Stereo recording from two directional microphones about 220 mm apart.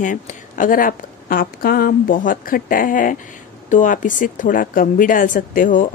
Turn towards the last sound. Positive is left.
turn(degrees=35)  # may be behind; listen again after turning